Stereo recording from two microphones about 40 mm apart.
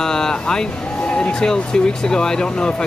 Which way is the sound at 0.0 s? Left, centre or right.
Centre.